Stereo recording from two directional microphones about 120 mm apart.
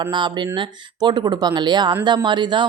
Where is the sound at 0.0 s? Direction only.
35° right (ahead or behind).